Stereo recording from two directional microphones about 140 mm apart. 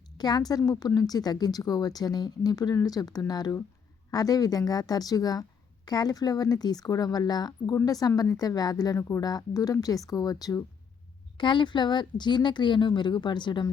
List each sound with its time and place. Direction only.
0.2 s a woman's voice: 30° left (ahead or behind)